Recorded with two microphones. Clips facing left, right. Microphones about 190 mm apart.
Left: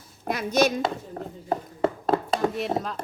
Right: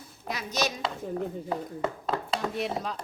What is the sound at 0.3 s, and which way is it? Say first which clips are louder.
Speech: left 8 dB; 55° left (ahead or behind).